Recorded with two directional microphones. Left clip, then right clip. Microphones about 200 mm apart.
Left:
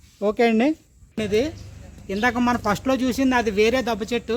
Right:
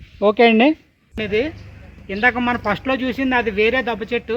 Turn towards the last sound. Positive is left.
turn(degrees=60)  # may be behind; listen again after turning